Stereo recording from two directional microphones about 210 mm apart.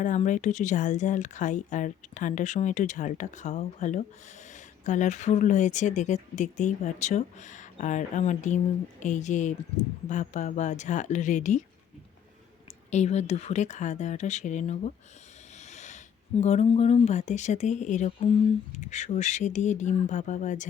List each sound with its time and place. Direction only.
0.0 s speech: 35° left (ahead or behind)
12.9 s speech: 30° left (ahead or behind)
15.5 s snort: 35° left (ahead or behind)
16.4 s speech: 30° left (ahead or behind)